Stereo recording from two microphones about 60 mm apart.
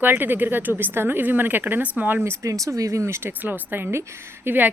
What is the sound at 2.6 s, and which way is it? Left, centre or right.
Speech, right.